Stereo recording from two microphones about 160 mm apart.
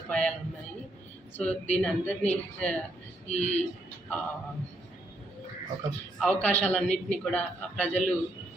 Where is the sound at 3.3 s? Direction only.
40° left (ahead or behind).